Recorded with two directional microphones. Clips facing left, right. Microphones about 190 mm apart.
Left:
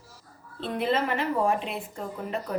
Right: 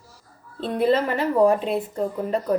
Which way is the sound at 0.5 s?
40° right (ahead or behind).